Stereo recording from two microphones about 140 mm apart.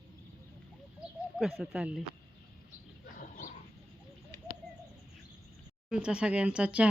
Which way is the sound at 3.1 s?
90° left.